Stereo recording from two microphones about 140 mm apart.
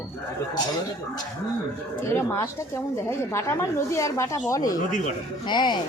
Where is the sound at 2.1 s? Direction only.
20° left (ahead or behind).